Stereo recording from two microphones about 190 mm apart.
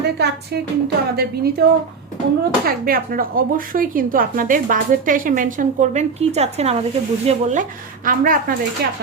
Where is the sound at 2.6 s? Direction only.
50° right (ahead or behind).